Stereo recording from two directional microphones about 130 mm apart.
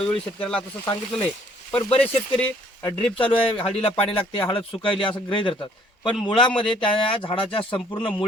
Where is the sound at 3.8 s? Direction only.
45° left (ahead or behind).